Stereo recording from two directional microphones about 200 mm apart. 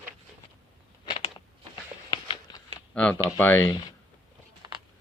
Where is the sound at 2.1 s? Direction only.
20° left (ahead or behind).